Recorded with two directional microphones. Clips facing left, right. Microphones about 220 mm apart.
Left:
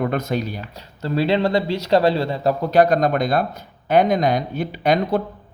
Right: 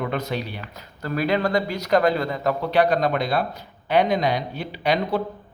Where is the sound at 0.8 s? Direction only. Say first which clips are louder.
Left 4 dB; 25° left (ahead or behind).